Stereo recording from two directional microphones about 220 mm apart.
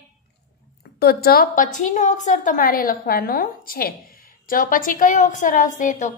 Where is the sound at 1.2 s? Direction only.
40° left (ahead or behind).